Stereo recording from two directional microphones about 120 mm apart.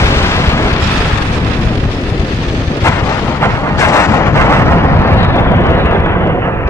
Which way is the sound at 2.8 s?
25° left (ahead or behind).